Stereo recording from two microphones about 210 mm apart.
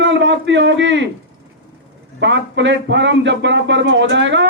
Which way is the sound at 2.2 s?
60° right (ahead or behind).